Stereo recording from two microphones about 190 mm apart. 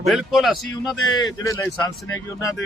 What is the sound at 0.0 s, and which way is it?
Speech, centre (ahead or behind).